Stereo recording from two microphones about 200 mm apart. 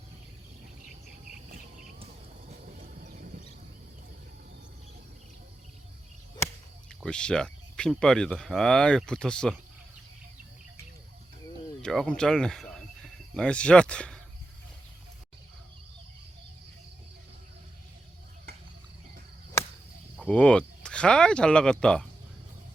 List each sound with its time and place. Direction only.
1.0 s cricket: 45° right (ahead or behind)
2.5 s a sound: 40° right (ahead or behind)
7.0 s speech: 5° left (ahead or behind)
11.8 s speech: 5° left (ahead or behind)
20.2 s speech: 5° left (ahead or behind)